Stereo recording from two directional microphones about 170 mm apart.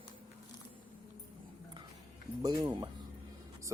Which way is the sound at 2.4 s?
25° right (ahead or behind).